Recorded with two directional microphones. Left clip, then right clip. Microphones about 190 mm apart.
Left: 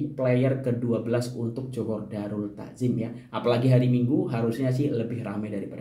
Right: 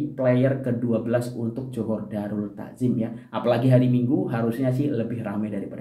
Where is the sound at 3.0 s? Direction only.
5° left (ahead or behind).